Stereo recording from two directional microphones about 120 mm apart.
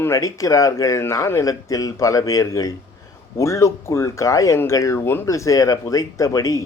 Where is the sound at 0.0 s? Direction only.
25° left (ahead or behind).